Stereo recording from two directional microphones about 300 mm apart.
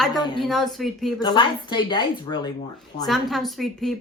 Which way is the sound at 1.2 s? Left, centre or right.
Centre.